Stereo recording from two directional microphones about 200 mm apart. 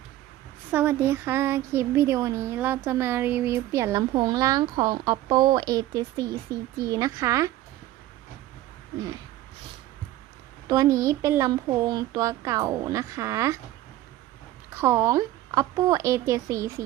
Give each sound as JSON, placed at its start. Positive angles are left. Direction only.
{"t": 0.7, "sound": "speech", "side_deg": -10}
{"t": 10.7, "sound": "speech", "side_deg": -15}
{"t": 14.8, "sound": "speech", "side_deg": -15}